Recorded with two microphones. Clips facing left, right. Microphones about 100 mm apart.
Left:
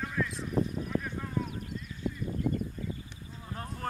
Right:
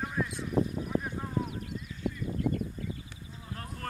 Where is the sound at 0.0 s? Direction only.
25° right (ahead or behind).